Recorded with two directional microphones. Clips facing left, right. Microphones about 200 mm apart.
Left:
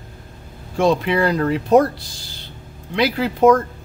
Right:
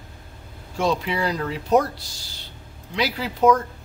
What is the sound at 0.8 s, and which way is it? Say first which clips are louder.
Speech: left 6 dB; 55° left (ahead or behind).